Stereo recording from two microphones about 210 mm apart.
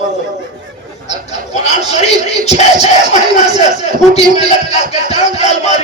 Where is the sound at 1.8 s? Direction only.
30° left (ahead or behind).